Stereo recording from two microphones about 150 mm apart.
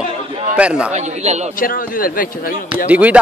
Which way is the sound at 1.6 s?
70° left (ahead or behind).